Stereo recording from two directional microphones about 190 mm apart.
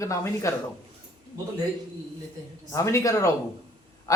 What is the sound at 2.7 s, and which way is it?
A man's voice, 15° left (ahead or behind).